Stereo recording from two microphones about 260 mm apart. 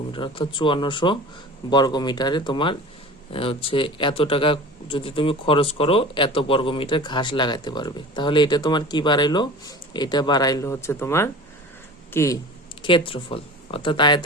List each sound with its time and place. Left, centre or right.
0.1 s a man's voice: centre